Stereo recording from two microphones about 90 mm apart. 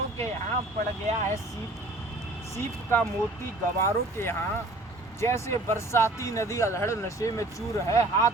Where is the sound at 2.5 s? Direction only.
25° left (ahead or behind).